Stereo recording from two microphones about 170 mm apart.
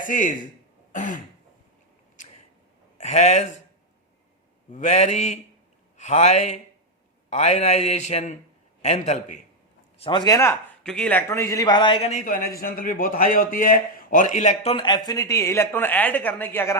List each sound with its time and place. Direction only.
0.0 s a man's voice: 50° left (ahead or behind)
0.9 s throat clearing: 50° left (ahead or behind)
3.0 s speech: 40° left (ahead or behind)
4.7 s mantra: 45° left (ahead or behind)
7.3 s a man's voice: 45° left (ahead or behind)
8.8 s mantra: 40° left (ahead or behind)
10.0 s speech: 30° left (ahead or behind)
10.8 s a man's voice: 5° left (ahead or behind); by 14.5 s 45° left (ahead or behind)
14.6 s speech: 30° left (ahead or behind); by 16.7 s 15° left (ahead or behind)